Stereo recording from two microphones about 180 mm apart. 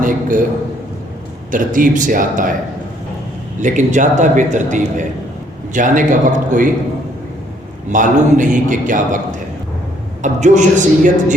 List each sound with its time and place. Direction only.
0.0 s a man's voice: 50° right (ahead or behind)
1.5 s a man's voice: 50° right (ahead or behind)
3.6 s a man's voice: 45° right (ahead or behind)
7.9 s a man's voice: 45° right (ahead or behind)
10.2 s a man's voice: 40° right (ahead or behind)